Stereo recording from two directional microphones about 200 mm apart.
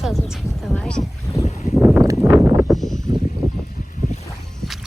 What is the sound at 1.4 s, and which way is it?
Boat, 35° left (ahead or behind).